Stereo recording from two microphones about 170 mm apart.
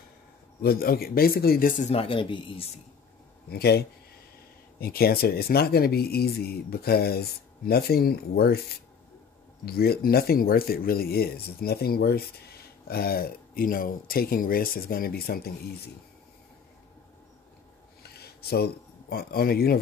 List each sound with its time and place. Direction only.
0.6 s speech: 60° left (ahead or behind)
1.9 s speech: 30° left (ahead or behind)
3.4 s speech: 70° left (ahead or behind)
9.7 s speech: 65° left (ahead or behind)
18.0 s speech: 70° left (ahead or behind)